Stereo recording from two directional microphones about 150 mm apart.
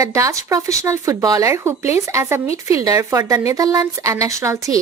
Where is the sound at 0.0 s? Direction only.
20° right (ahead or behind).